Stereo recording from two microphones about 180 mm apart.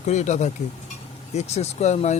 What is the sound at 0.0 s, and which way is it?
Speech, 40° left (ahead or behind).